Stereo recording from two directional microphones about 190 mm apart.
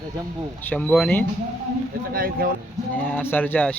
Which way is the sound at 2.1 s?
50° right (ahead or behind).